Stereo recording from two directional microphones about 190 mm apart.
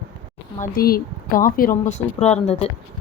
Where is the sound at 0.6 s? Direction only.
50° left (ahead or behind).